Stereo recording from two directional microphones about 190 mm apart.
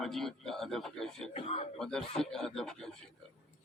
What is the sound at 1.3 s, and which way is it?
Speech, 30° left (ahead or behind).